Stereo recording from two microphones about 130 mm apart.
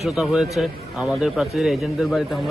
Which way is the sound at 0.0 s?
Centre (ahead or behind).